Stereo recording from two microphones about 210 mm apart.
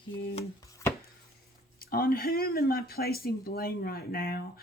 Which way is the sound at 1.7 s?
45° left (ahead or behind).